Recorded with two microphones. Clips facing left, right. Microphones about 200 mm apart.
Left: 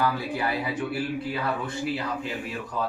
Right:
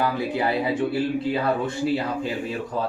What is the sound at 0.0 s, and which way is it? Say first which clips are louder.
Speech: right 3 dB; 25° right (ahead or behind).